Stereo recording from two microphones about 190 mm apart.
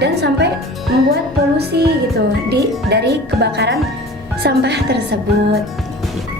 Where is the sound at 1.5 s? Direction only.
60° right (ahead or behind).